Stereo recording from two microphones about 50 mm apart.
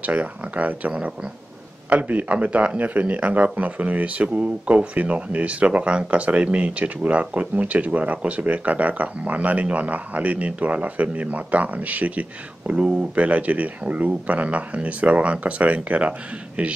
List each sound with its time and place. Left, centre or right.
0.0 s speech: right